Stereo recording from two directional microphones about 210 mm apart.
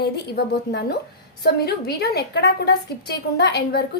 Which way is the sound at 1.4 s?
50° left (ahead or behind).